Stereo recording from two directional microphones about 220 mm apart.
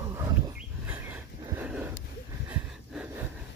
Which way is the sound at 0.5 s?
5° right (ahead or behind).